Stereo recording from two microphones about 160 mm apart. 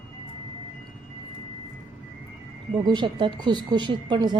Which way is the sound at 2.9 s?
30° right (ahead or behind).